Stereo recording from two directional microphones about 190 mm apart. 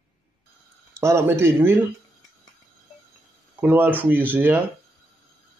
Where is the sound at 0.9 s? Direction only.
15° right (ahead or behind).